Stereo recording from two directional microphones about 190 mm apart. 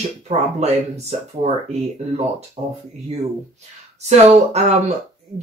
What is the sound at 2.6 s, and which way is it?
Speech, 30° right (ahead or behind).